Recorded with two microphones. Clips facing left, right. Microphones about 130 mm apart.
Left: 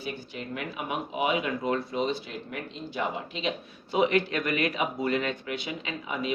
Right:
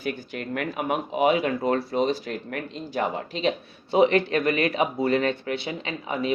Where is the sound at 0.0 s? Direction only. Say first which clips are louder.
Right 5 dB; 50° right (ahead or behind).